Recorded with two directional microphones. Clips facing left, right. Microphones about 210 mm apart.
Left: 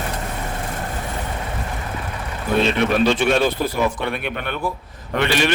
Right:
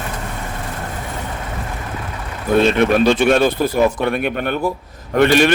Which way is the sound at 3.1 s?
50° right (ahead or behind).